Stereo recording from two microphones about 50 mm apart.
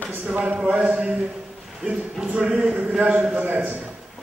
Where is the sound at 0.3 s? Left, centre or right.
Right.